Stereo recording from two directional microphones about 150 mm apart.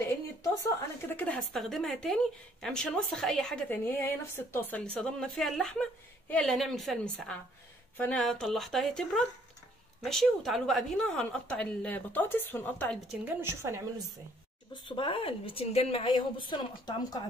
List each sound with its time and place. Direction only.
1.0 s a woman's voice: 10° left (ahead or behind)
13.2 s a woman's voice: 15° right (ahead or behind)
14.7 s speech: 30° left (ahead or behind)